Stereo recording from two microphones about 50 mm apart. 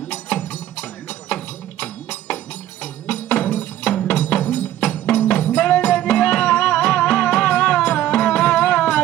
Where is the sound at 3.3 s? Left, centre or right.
Left.